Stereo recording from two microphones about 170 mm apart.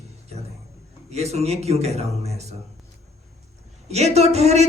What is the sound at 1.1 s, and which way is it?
Speech, 40° right (ahead or behind).